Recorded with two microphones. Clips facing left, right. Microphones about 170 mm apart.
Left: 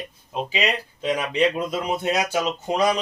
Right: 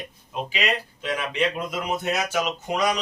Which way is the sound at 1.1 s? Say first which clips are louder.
Left 3 dB; 35° left (ahead or behind).